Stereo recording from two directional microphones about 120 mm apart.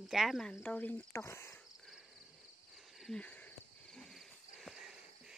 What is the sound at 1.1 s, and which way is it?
Speech, 25° left (ahead or behind).